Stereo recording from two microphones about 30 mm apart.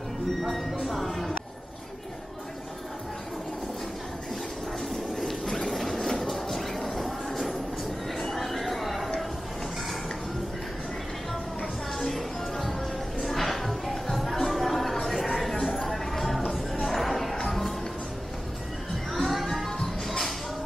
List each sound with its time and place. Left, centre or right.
0.4 s speech: centre
0.8 s music: centre
4.7 s a sound: centre
5.7 s train: centre
8.1 s music: centre
12.1 s music: centre
14.1 s a sound: centre
15.7 s music: centre
19.1 s music: centre